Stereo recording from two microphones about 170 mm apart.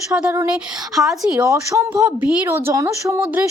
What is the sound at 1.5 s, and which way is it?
A woman's voice, 20° right (ahead or behind).